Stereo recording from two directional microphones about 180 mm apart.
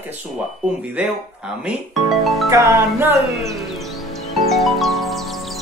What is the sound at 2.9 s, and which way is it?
Speech, 15° right (ahead or behind).